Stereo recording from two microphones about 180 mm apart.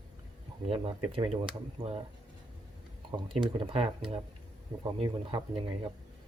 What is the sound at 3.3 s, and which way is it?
Speech, 30° right (ahead or behind).